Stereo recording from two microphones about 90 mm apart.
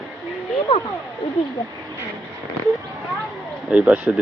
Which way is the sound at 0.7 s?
80° left.